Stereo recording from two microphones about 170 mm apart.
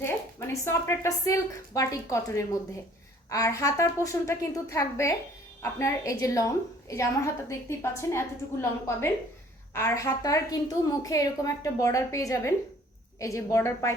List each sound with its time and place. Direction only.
0.0 s a woman's voice: 15° left (ahead or behind)
9.7 s a woman's voice: 15° left (ahead or behind)